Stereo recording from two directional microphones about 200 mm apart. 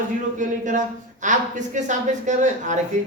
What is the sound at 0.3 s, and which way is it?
Speech, 40° right (ahead or behind).